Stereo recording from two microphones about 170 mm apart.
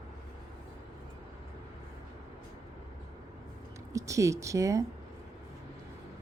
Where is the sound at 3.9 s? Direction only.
20° right (ahead or behind).